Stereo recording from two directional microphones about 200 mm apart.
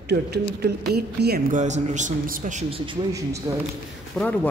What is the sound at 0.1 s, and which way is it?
Speech, 55° right (ahead or behind).